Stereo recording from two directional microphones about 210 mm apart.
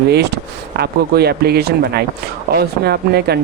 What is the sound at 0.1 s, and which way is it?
Speech, 50° right (ahead or behind).